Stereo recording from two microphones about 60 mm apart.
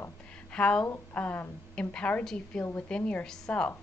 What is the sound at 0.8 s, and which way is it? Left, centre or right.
A woman's voice, left.